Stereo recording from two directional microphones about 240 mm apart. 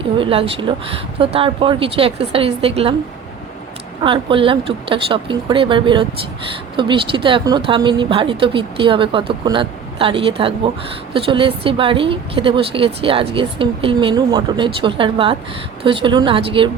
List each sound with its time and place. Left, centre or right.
0.0 s a woman's voice: right
4.0 s a woman's voice: right